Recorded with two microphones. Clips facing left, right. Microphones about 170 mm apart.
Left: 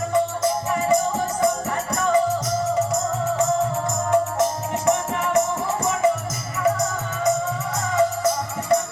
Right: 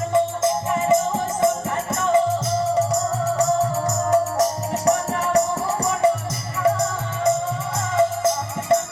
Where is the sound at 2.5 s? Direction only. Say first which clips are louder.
Right 2 dB; 30° right (ahead or behind).